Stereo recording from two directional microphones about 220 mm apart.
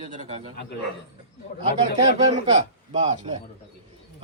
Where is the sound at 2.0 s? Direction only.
20° right (ahead or behind).